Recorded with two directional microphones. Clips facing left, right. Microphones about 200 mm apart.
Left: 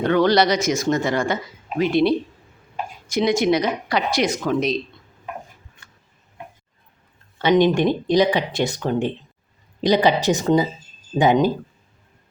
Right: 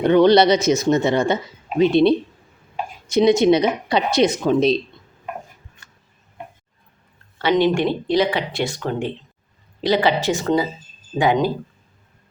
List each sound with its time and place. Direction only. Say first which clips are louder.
0.0 s speech: right 4 dB; 20° right (ahead or behind)
7.3 s speech: left 1 dB; 15° left (ahead or behind)